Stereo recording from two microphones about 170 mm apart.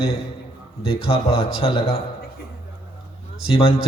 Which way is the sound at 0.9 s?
35° left (ahead or behind).